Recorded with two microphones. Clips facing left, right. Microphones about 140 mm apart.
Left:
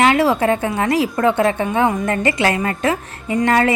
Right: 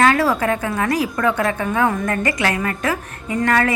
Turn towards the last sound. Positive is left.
turn(degrees=25)  # may be behind; listen again after turning